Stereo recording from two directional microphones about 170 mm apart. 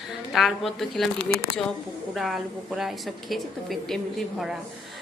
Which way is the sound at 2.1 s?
Centre (ahead or behind).